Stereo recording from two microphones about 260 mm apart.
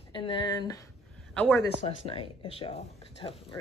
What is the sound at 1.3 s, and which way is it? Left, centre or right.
Speech, centre.